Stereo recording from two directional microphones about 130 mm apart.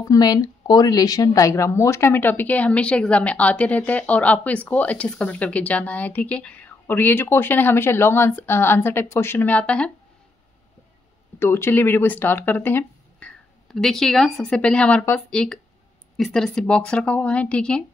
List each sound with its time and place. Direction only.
0.0 s speech: 30° left (ahead or behind); by 9.8 s 10° left (ahead or behind)
11.3 s speech: 20° left (ahead or behind)
13.7 s a woman's voice: 5° left (ahead or behind)